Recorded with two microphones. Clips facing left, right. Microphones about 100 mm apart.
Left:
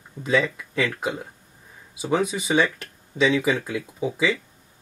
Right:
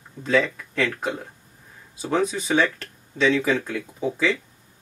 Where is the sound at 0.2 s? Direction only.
10° left (ahead or behind).